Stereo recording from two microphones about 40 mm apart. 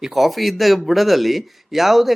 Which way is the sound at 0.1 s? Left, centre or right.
Centre.